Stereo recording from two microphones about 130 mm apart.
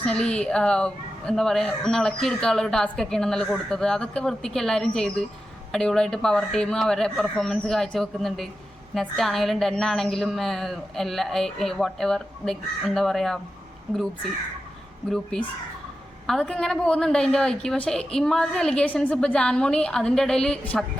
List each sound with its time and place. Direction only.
0.0 s speech: 5° left (ahead or behind)
15.1 s speech: 5° left (ahead or behind)